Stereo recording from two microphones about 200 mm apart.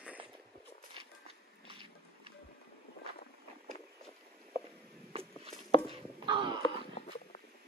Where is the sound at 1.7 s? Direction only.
25° right (ahead or behind).